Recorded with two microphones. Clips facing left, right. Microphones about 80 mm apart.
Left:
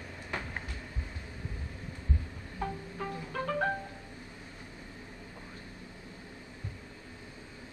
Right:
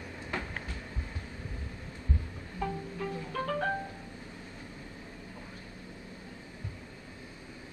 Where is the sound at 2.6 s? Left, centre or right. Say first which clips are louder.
Right 2 dB; left.